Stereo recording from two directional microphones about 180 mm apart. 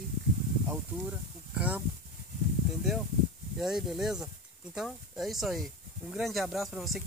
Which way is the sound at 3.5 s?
Centre (ahead or behind).